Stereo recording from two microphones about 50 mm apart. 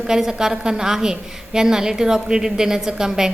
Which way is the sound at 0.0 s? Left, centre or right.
Centre.